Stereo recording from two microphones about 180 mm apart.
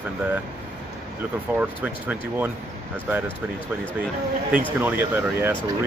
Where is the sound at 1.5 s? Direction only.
10° right (ahead or behind).